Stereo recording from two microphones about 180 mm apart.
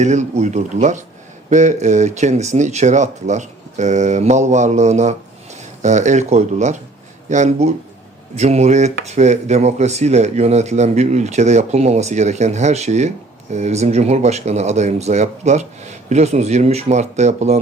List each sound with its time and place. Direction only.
0.0 s speech: 40° right (ahead or behind)